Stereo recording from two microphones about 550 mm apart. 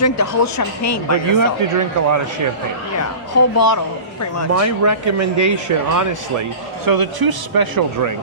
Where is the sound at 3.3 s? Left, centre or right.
Left.